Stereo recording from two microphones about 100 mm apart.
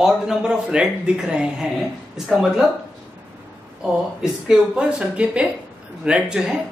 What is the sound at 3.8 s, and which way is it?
Speech, 5° right (ahead or behind).